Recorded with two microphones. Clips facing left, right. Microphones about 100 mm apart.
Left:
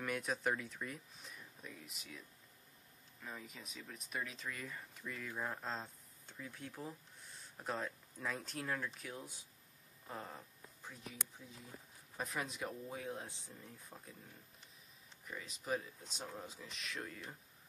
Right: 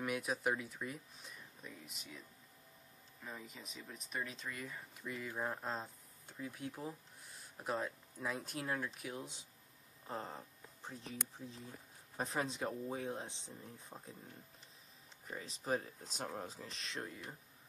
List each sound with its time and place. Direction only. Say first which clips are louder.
0.0 s speech: right 1 dB; 5° right (ahead or behind)
3.3 s speech: even; centre (ahead or behind); by 14.1 s 25° right (ahead or behind)
15.2 s speech: right 2 dB; 35° right (ahead or behind)